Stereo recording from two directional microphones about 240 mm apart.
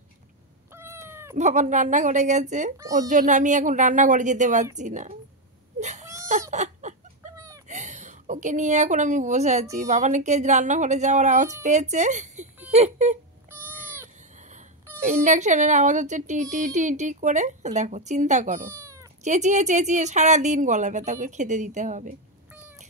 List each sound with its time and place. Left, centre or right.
0.7 s cat: centre
1.3 s speech: right
5.8 s whimper: right
6.5 s a sound: right
7.3 s a sound: centre
7.6 s a woman's voice: right
13.5 s cat: centre
15.0 s speech: right
18.7 s cat: centre
19.2 s speech: right